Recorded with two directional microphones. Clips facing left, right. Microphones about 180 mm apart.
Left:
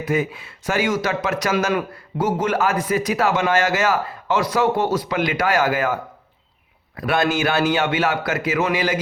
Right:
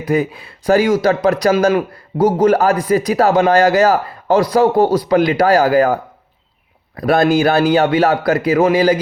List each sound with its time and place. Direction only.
0.0 s speech: 35° right (ahead or behind)